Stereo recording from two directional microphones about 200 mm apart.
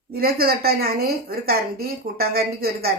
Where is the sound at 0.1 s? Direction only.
50° right (ahead or behind).